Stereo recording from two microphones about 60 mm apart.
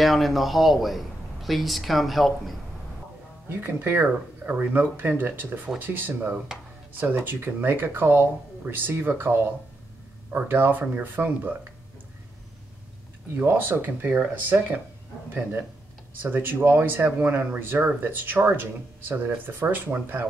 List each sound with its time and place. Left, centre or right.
0.0 s a man's voice: centre
3.4 s speech: right
13.4 s speech: right
16.2 s speech: right